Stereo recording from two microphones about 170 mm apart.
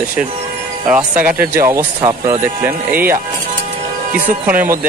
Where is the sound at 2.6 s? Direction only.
15° right (ahead or behind).